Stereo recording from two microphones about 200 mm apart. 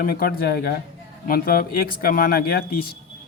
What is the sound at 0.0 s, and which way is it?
Speech, 50° left (ahead or behind).